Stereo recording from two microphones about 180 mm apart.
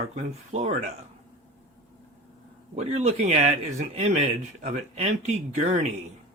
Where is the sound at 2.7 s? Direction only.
40° right (ahead or behind).